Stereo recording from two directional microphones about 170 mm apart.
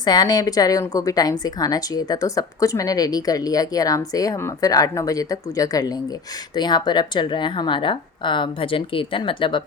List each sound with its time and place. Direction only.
0.0 s a woman's voice: 25° left (ahead or behind)